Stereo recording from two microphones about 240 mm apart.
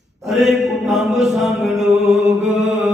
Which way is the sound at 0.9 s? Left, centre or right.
Centre.